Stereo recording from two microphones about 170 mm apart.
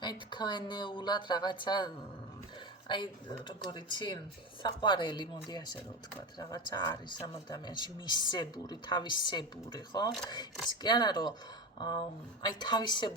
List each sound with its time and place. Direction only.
0.0 s speech: 25° left (ahead or behind)
12.4 s speech: 25° left (ahead or behind)